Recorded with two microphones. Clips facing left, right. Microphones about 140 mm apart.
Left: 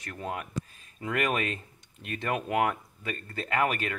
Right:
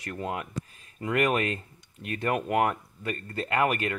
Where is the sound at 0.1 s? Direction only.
10° right (ahead or behind).